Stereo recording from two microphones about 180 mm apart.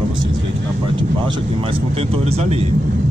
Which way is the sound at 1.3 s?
30° right (ahead or behind).